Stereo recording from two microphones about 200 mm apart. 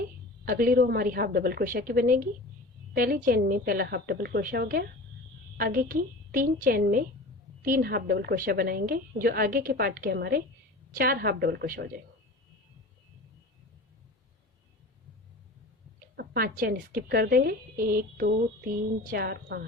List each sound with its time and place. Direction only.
0.4 s a woman's voice: 45° right (ahead or behind)
16.1 s a woman's voice: 45° right (ahead or behind)